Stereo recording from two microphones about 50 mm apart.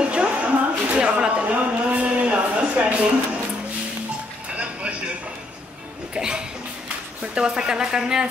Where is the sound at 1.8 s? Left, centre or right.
Right.